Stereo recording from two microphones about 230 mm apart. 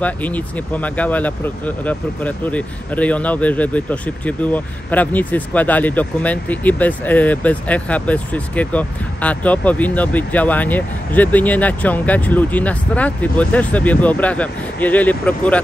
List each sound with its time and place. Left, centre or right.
0.0 s speech: centre